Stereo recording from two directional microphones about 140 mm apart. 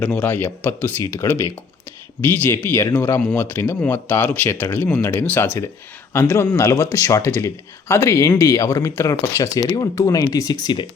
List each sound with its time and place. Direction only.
0.1 s speech: 10° left (ahead or behind); by 10.8 s 30° left (ahead or behind)